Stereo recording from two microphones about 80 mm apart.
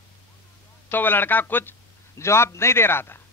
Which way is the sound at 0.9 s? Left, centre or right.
Left.